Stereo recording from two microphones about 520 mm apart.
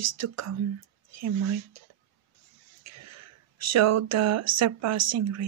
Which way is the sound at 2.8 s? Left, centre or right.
Right.